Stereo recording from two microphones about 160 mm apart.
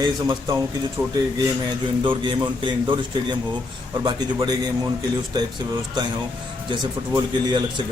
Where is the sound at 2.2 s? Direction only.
30° right (ahead or behind).